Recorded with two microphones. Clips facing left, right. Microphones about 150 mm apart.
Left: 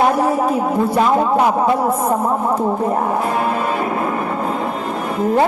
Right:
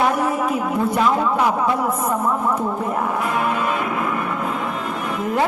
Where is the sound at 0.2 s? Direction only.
35° left (ahead or behind).